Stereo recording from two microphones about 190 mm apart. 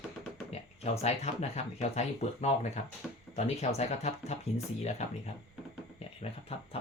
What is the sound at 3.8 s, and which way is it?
Speech, 35° left (ahead or behind).